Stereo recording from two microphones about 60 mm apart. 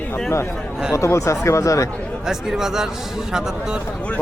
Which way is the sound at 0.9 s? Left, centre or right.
Left.